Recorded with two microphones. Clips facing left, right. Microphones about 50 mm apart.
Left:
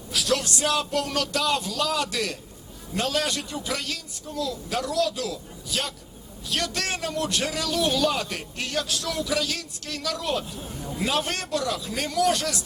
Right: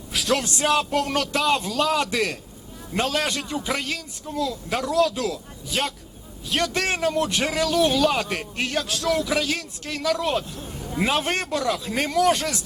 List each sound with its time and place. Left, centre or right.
0.1 s a man's voice: right